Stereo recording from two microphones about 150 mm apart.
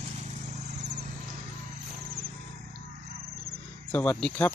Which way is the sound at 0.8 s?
50° right (ahead or behind).